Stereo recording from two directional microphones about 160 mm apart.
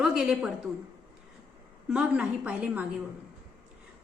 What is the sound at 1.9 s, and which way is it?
Speech, 5° right (ahead or behind).